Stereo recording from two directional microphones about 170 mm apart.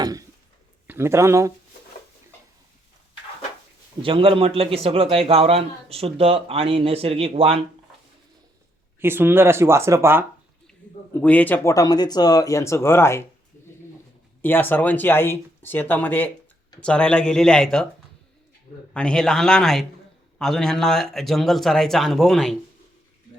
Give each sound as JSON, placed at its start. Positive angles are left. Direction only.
{"t": 0.0, "sound": "a sound", "side_deg": -20}
{"t": 0.9, "sound": "speech", "side_deg": -15}
{"t": 4.0, "sound": "a man's voice", "side_deg": -30}
{"t": 9.0, "sound": "speech", "side_deg": -15}
{"t": 11.1, "sound": "speech", "side_deg": 10}
{"t": 14.4, "sound": "speech", "side_deg": 10}
{"t": 18.9, "sound": "speech", "side_deg": 5}